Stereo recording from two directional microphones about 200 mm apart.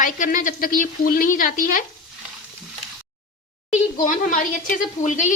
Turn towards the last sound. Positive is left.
turn(degrees=40)  # may be behind; listen again after turning